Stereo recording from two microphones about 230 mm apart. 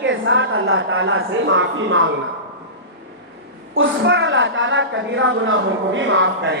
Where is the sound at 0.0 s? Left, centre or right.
Right.